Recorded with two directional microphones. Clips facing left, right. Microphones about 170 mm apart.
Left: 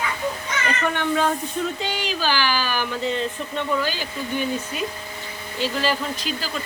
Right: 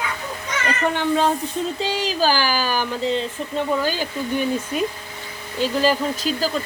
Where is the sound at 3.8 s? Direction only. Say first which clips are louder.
Right 4 dB; 45° right (ahead or behind).